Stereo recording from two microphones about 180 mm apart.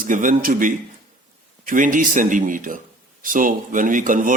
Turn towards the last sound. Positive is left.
turn(degrees=-45)  # may be behind; listen again after turning